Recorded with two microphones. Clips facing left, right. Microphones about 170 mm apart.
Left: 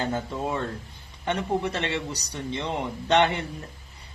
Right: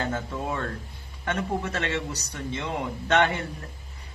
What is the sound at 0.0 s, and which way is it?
Speech, 20° left (ahead or behind).